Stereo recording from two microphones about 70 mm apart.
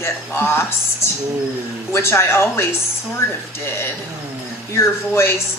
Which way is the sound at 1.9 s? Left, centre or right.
Left.